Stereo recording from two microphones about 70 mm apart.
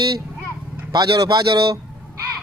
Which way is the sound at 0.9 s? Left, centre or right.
Right.